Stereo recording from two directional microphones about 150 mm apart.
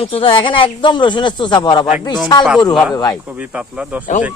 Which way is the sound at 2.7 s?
Centre (ahead or behind).